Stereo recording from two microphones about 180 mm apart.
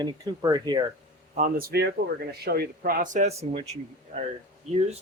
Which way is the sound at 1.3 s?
50° right (ahead or behind).